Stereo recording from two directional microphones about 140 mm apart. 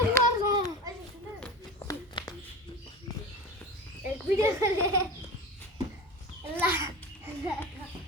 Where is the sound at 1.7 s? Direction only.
25° left (ahead or behind).